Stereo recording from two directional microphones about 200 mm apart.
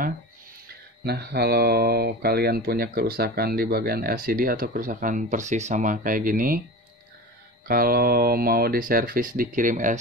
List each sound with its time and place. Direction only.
1.0 s speech: 55° right (ahead or behind)
7.6 s speech: 50° right (ahead or behind)